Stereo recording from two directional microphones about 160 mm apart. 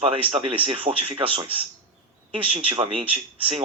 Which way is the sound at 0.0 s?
35° right (ahead or behind).